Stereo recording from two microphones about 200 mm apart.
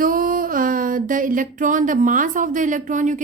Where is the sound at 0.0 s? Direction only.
45° right (ahead or behind).